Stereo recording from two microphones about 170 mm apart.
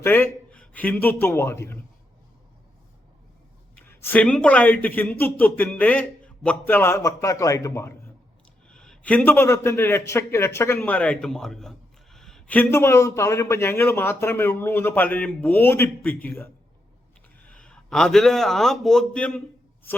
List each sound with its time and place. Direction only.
0.0 s a man's voice: 15° left (ahead or behind)
3.8 s a man's voice: 10° left (ahead or behind)
8.7 s a man's voice: 5° left (ahead or behind)
17.5 s a man's voice: 5° left (ahead or behind)